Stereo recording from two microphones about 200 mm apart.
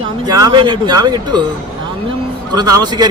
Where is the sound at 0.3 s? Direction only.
20° right (ahead or behind).